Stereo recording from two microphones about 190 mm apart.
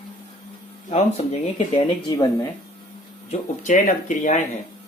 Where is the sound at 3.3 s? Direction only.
40° left (ahead or behind).